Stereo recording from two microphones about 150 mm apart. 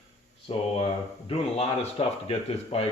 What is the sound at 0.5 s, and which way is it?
Speech, 40° left (ahead or behind).